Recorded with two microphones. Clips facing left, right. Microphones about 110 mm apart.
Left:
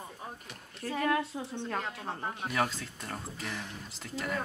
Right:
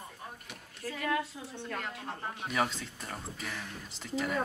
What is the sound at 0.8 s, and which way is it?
Speech, 35° left (ahead or behind).